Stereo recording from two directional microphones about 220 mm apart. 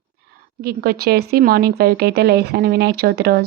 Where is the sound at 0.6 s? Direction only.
45° right (ahead or behind).